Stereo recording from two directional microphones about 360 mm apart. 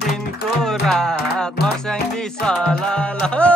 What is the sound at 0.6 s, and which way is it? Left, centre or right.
Music, centre.